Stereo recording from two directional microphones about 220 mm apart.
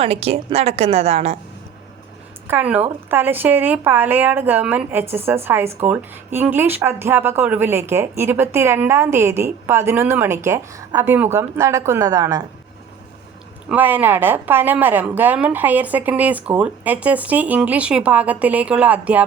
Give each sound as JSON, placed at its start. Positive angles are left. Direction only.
{"t": 0.0, "sound": "a woman's voice", "side_deg": -25}
{"t": 2.5, "sound": "speech", "side_deg": -10}
{"t": 13.7, "sound": "speech", "side_deg": -10}